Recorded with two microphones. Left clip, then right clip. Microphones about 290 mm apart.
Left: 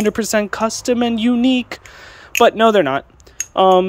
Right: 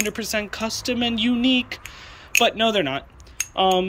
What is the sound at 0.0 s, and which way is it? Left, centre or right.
Speech, left.